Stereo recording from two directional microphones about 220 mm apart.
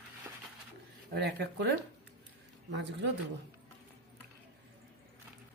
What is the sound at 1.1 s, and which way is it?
Speech, 45° right (ahead or behind).